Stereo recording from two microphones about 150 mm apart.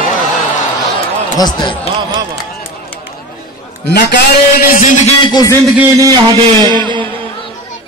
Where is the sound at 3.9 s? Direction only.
90° left.